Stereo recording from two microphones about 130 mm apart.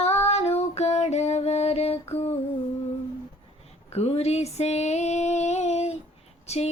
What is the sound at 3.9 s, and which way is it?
Female singing, 55° left (ahead or behind).